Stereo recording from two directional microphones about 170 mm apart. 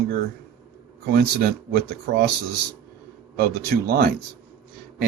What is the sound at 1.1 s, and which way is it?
A man's voice, 65° right (ahead or behind).